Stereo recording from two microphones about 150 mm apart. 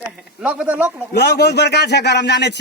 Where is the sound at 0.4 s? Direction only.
10° right (ahead or behind).